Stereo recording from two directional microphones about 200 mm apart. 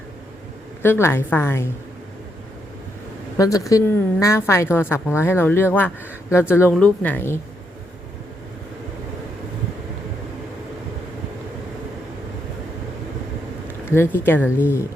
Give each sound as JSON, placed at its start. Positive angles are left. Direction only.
{"t": 0.8, "sound": "a woman's voice", "side_deg": 10}
{"t": 3.3, "sound": "a woman's voice", "side_deg": 15}
{"t": 13.8, "sound": "a woman's voice", "side_deg": 10}